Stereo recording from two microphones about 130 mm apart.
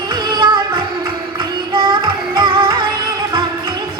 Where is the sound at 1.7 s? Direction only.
40° right (ahead or behind).